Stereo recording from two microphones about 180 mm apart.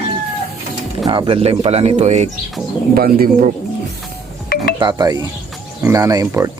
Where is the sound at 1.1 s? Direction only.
30° right (ahead or behind).